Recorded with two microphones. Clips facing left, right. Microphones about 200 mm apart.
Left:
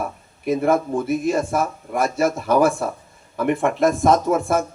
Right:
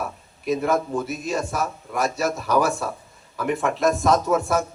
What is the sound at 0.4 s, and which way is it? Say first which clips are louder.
Speech: left 3 dB; 55° left (ahead or behind).